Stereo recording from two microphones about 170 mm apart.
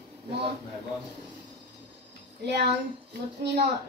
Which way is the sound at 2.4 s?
80° right.